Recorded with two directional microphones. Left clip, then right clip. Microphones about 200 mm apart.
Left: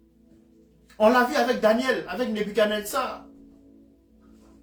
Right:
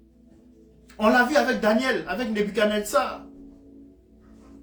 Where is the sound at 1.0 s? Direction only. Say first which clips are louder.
Even; 25° right (ahead or behind).